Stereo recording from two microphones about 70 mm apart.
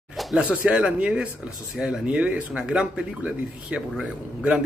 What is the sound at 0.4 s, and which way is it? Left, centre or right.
A man's voice, centre.